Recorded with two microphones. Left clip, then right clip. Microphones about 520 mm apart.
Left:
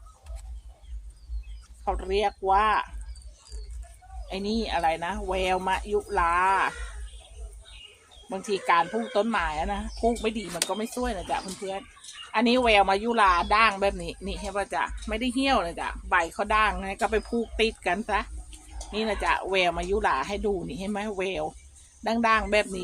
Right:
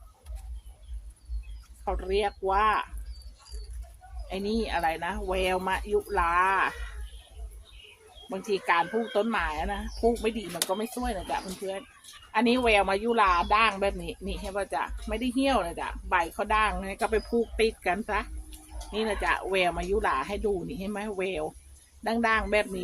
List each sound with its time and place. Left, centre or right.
1.8 s speech: right
4.3 s speech: right
8.3 s speech: right